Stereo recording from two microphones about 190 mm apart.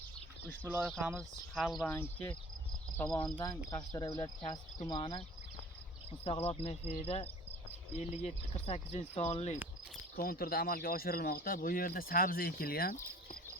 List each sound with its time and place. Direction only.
0.6 s speech: 10° right (ahead or behind)
1.5 s speech: centre (ahead or behind)
1.8 s speech: 10° left (ahead or behind)
3.2 s speech: 25° left (ahead or behind)
6.2 s speech: 30° left (ahead or behind)
10.2 s speech: 50° left (ahead or behind)